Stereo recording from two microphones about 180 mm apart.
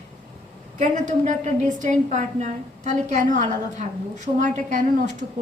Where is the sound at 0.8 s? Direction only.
40° right (ahead or behind).